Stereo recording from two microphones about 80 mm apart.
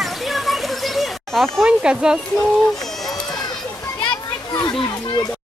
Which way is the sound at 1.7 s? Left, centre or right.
Centre.